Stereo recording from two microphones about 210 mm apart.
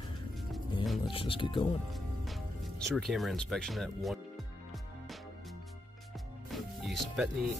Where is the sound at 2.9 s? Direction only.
Centre (ahead or behind).